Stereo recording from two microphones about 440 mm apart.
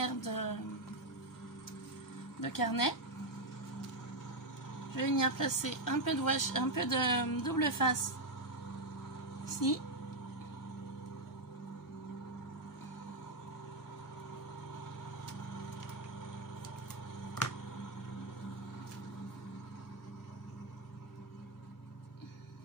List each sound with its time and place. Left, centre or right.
0.0 s a sound: left
2.4 s speech: left
4.9 s speech: left
9.5 s speech: left